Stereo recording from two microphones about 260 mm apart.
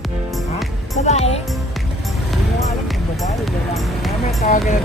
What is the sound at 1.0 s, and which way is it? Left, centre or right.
Speech, left.